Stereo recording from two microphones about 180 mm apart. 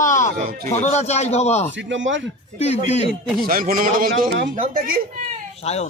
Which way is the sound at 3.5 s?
55° right (ahead or behind).